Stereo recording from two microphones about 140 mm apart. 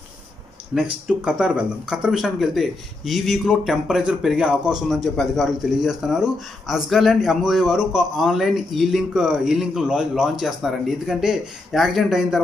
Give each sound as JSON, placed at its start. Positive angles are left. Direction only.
{"t": 0.7, "sound": "a man's voice", "side_deg": -5}